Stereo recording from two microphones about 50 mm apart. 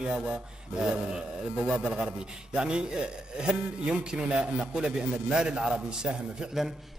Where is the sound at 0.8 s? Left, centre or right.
Centre.